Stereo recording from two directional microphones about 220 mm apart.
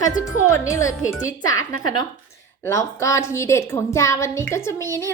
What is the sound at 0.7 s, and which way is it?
Speech, 15° left (ahead or behind).